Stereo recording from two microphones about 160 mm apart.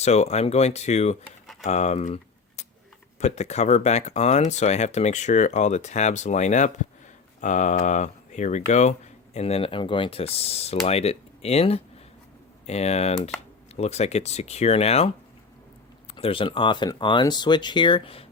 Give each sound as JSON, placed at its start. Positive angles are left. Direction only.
{"t": 0.0, "sound": "speech", "side_deg": 45}